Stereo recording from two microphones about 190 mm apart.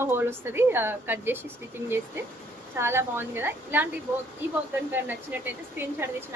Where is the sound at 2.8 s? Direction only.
10° right (ahead or behind).